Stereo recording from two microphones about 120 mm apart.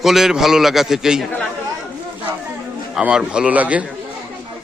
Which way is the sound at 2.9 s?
5° right (ahead or behind).